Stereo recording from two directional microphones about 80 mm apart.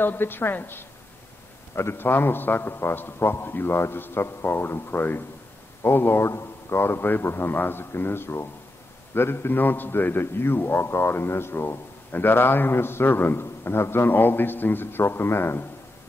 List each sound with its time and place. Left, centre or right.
0.0 s a man's voice: left